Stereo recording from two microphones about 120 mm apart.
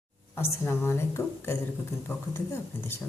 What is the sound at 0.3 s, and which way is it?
Speech, 20° left (ahead or behind).